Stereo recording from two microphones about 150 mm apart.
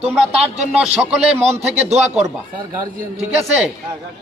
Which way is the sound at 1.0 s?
5° right (ahead or behind).